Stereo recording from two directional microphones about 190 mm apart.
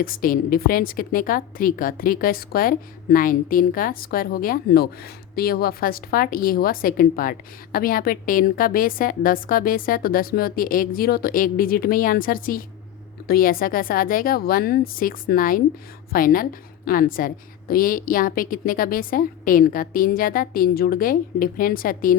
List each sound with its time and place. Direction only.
0.0 s a woman's voice: 50° left (ahead or behind)